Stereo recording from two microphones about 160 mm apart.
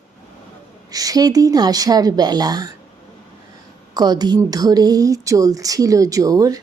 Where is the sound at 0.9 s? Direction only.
25° right (ahead or behind).